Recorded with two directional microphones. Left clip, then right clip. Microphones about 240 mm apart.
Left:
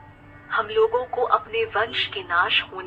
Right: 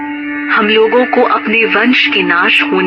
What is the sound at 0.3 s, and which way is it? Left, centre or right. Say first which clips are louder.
Speech: right 11 dB; right.